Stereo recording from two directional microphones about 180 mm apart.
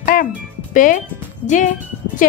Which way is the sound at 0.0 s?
50° left (ahead or behind).